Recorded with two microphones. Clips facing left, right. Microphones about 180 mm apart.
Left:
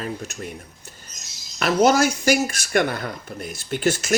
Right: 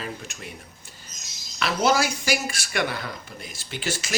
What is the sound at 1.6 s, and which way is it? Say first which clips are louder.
Speech: left 5 dB; 45° left (ahead or behind).